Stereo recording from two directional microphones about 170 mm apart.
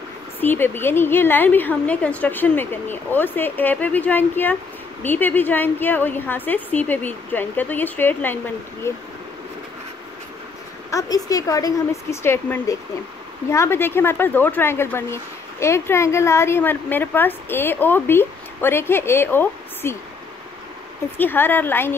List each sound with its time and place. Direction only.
0.4 s speech: 10° left (ahead or behind)
10.9 s a woman's voice: 20° left (ahead or behind)
21.2 s speech: 10° left (ahead or behind)